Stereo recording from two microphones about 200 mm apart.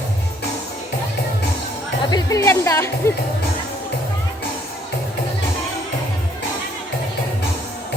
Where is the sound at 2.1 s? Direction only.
20° left (ahead or behind).